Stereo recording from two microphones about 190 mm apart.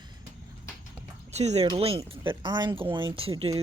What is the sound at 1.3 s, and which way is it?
Speech, 35° right (ahead or behind).